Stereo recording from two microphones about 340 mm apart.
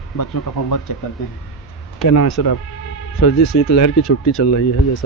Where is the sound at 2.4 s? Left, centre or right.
Left.